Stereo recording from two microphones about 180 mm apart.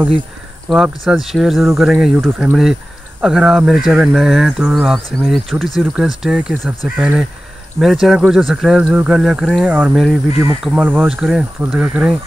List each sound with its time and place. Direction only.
0.7 s speech: centre (ahead or behind)
10.3 s speech: 35° left (ahead or behind)
10.6 s speech: 5° right (ahead or behind)